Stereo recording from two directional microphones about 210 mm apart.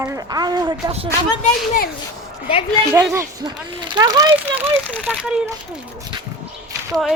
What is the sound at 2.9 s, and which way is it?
A child's voice, 10° right (ahead or behind).